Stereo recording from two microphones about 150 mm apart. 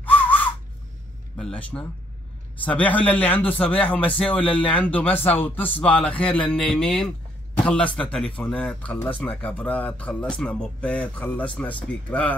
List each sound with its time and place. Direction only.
0.0 s whistle: 10° left (ahead or behind)
1.3 s speech: 10° left (ahead or behind)